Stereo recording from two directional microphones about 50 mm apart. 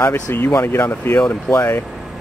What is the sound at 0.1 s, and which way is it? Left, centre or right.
Speech, left.